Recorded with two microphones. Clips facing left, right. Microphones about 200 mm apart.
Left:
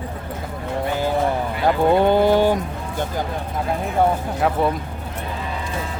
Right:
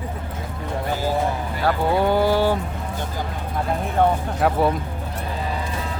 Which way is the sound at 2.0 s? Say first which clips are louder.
Left 3 dB; 20° left (ahead or behind).